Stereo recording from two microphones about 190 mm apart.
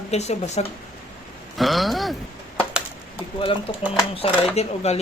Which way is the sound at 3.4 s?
25° left (ahead or behind).